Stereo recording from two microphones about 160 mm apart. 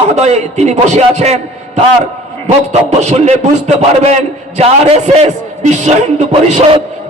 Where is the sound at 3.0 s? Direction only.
45° right (ahead or behind).